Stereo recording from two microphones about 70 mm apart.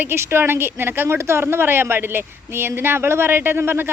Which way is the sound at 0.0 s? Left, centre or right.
Right.